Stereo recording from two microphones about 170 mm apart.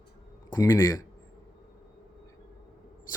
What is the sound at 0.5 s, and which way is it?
Speech, 15° left (ahead or behind).